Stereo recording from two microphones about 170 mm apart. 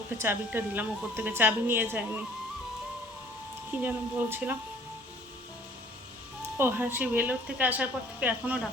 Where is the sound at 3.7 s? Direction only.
10° right (ahead or behind).